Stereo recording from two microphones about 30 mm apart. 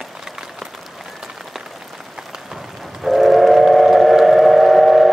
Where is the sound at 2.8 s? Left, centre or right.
Centre.